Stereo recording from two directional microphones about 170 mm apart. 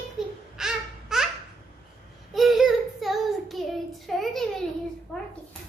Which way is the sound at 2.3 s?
Centre (ahead or behind).